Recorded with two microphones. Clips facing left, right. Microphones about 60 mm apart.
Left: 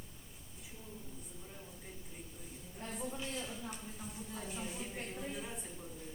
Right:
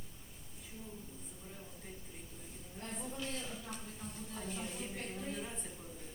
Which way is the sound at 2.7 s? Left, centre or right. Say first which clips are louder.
Left 1 dB; centre.